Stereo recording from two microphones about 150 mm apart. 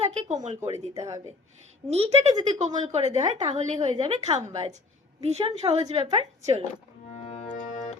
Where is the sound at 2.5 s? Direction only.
50° right (ahead or behind).